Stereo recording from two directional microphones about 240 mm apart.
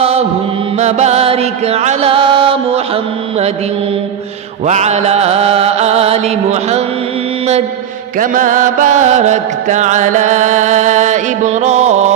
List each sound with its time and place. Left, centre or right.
0.0 s chant: right
4.6 s chant: right
8.2 s music: right